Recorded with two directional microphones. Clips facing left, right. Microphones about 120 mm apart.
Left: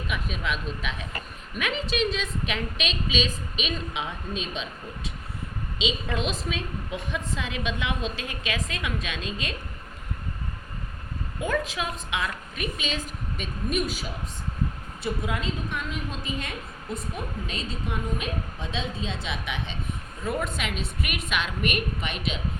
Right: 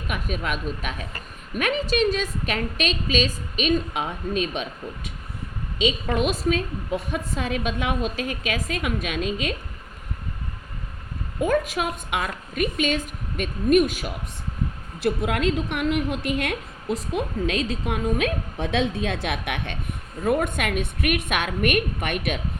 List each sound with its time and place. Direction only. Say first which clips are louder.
0.1 s a woman's voice: right 4 dB; 45° right (ahead or behind)
11.6 s a woman's voice: right 4 dB; 50° right (ahead or behind)
15.3 s a woman's voice: right 7 dB; 85° right; by 22.4 s 55° right (ahead or behind)